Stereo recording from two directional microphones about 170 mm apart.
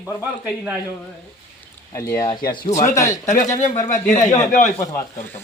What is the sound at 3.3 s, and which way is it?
A man's voice, 45° left (ahead or behind).